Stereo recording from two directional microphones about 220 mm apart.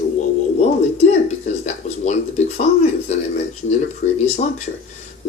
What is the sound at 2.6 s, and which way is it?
Speech, 30° left (ahead or behind).